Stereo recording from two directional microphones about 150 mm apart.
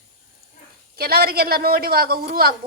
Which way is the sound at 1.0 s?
90° right.